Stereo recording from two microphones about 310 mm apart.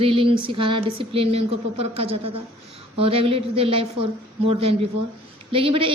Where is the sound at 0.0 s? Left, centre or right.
Centre.